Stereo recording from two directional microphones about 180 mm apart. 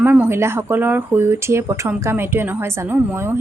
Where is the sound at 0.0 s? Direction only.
10° right (ahead or behind).